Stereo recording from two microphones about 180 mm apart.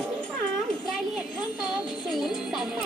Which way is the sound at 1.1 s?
Centre (ahead or behind).